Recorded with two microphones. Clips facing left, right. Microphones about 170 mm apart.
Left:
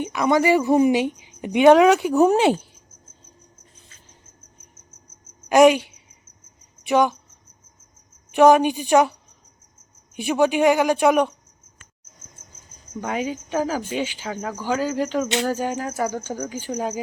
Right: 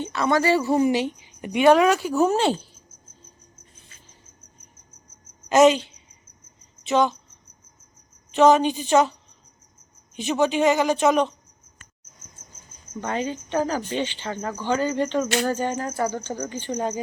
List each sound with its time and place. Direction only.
0.0 s speech: 15° left (ahead or behind)
5.5 s speech: 10° left (ahead or behind)
8.3 s speech: 15° left (ahead or behind)
10.2 s speech: 10° left (ahead or behind)
13.0 s speech: 10° left (ahead or behind)